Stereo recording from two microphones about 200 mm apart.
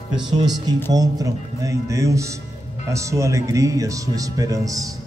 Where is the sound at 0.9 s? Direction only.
20° right (ahead or behind).